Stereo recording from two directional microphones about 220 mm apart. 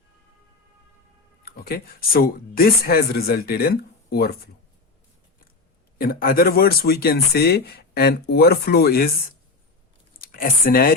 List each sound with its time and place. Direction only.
1.5 s speech: 45° left (ahead or behind)
6.0 s speech: 40° left (ahead or behind)
10.2 s speech: 40° left (ahead or behind)